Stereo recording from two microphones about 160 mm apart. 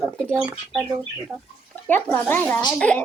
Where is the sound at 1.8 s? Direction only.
10° left (ahead or behind).